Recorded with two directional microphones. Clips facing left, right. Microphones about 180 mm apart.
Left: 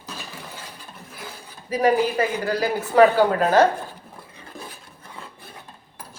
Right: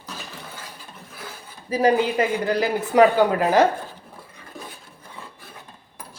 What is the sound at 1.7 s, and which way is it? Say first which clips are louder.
Speech: even; 25° right (ahead or behind).